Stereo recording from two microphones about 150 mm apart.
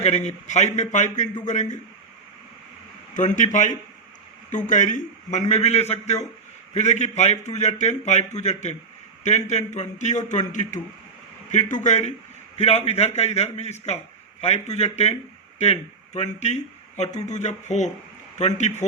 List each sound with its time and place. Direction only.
0.0 s a man's voice: 50° left (ahead or behind)
3.2 s a man's voice: 55° left (ahead or behind)